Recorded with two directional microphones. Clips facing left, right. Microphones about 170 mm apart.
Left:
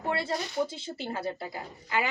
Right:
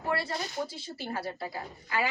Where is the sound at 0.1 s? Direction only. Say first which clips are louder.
Left 1 dB; 25° left (ahead or behind).